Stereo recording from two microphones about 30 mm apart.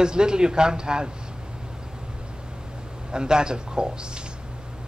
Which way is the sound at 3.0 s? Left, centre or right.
Right.